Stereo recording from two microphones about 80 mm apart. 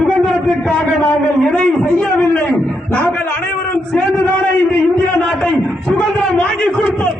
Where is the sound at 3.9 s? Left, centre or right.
Centre.